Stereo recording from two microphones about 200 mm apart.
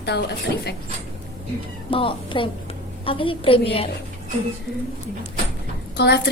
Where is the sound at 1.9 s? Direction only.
25° left (ahead or behind).